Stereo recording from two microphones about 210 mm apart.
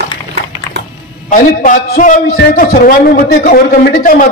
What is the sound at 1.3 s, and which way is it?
A man's voice, 40° left (ahead or behind).